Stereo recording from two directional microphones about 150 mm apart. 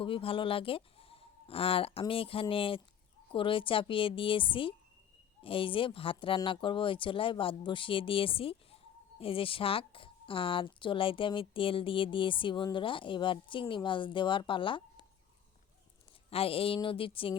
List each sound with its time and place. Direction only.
0.0 s speech: 35° left (ahead or behind)
16.3 s speech: 40° left (ahead or behind)